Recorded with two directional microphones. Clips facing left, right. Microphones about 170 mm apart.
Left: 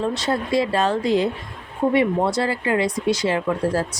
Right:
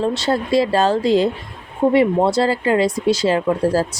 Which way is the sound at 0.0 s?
30° right (ahead or behind).